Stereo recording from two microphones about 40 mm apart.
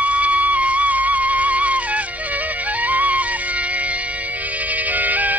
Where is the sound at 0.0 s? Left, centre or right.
Right.